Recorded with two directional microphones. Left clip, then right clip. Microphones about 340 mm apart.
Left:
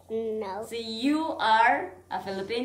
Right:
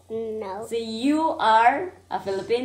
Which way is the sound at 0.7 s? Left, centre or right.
Centre.